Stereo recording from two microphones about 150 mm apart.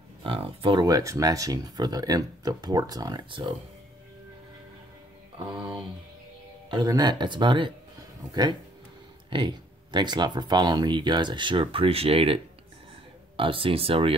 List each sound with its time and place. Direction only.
0.2 s speech: 35° right (ahead or behind)
5.5 s a sound: 30° right (ahead or behind)
6.7 s speech: 30° right (ahead or behind)
9.3 s speech: 30° right (ahead or behind)
13.4 s speech: 35° right (ahead or behind)